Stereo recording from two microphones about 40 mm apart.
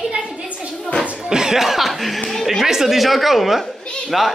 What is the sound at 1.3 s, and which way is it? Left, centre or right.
Speech, centre.